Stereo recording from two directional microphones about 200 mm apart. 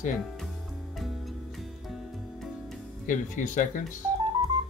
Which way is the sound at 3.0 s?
40° left (ahead or behind).